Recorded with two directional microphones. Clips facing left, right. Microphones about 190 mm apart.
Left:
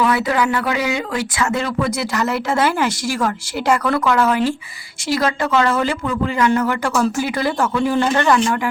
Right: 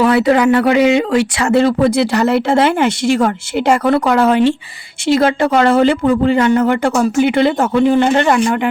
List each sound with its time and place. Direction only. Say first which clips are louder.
0.3 s speech: right 8 dB; 25° right (ahead or behind)